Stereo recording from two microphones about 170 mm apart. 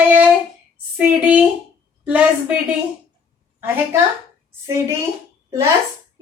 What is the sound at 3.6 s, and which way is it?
Speech, 15° right (ahead or behind).